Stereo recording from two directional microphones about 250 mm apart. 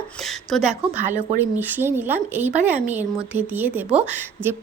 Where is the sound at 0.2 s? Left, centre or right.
Centre.